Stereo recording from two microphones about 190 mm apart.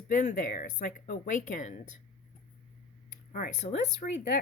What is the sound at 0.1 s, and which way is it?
Speech, 40° left (ahead or behind).